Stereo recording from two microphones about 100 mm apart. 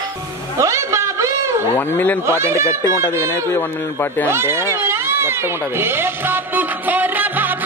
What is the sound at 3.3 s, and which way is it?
Speech, 25° left (ahead or behind).